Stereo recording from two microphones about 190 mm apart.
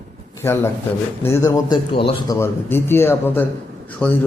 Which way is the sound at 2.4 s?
10° left (ahead or behind).